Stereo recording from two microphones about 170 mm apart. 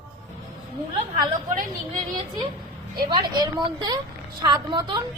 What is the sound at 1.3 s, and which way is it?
Speech, 55° right (ahead or behind).